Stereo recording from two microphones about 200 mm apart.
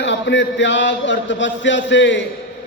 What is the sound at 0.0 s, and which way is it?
A man's voice, 65° left (ahead or behind).